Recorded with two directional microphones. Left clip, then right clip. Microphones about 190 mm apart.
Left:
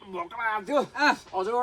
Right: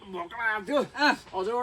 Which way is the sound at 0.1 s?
20° left (ahead or behind).